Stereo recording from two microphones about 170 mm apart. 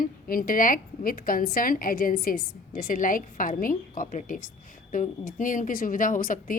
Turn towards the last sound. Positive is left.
turn(degrees=50)  # may be behind; listen again after turning